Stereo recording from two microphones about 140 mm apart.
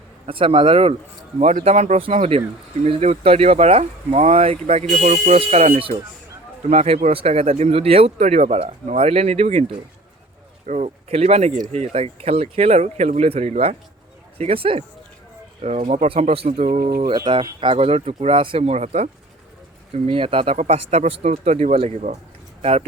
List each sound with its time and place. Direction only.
0.3 s a man's voice: 40° right (ahead or behind)
1.4 s speech: 55° right (ahead or behind)
5.4 s speech: 50° right (ahead or behind)
10.7 s speech: 50° right (ahead or behind)
15.9 s speech: 45° right (ahead or behind)
16.8 s mantra: 90° right
17.1 s speech: 30° right (ahead or behind); by 22.9 s 50° right (ahead or behind)